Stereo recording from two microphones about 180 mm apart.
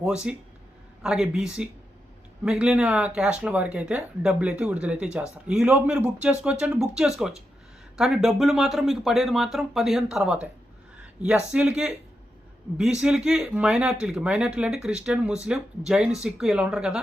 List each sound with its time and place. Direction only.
0.0 s speech: 5° right (ahead or behind)